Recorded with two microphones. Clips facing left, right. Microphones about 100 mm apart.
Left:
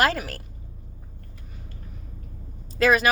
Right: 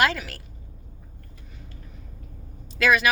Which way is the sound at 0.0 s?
40° left (ahead or behind).